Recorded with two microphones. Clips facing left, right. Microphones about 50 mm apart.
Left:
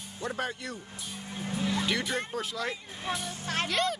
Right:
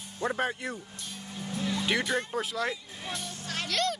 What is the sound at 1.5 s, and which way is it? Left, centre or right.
Music, centre.